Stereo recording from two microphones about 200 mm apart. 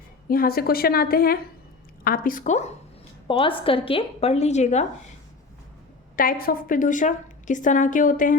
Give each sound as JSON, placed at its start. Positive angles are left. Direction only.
{"t": 0.3, "sound": "a woman's voice", "side_deg": 45}
{"t": 6.1, "sound": "a woman's voice", "side_deg": 45}